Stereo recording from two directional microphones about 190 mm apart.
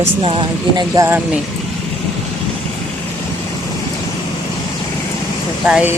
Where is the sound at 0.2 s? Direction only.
25° right (ahead or behind).